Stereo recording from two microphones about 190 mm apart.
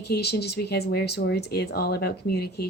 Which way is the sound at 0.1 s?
60° left (ahead or behind).